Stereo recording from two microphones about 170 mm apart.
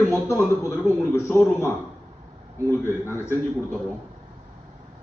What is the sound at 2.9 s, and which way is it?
Speech, 15° right (ahead or behind).